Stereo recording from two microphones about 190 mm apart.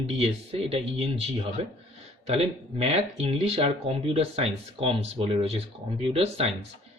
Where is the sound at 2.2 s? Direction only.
30° right (ahead or behind).